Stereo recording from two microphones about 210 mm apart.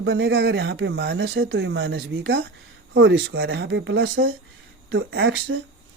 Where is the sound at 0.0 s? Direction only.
55° right (ahead or behind).